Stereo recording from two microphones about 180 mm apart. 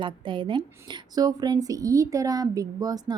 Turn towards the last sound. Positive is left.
turn(degrees=-20)  # may be behind; listen again after turning